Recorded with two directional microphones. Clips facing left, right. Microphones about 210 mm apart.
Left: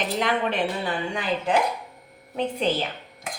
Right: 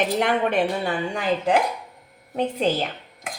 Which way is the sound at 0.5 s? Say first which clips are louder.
Right 4 dB; 45° right (ahead or behind).